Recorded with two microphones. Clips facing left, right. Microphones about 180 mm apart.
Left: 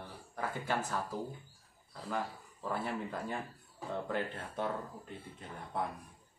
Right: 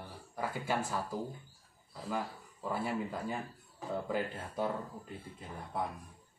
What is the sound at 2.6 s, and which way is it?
Speech, 5° right (ahead or behind).